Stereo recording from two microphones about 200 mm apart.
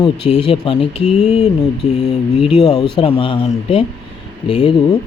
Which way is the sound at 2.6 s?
20° left (ahead or behind).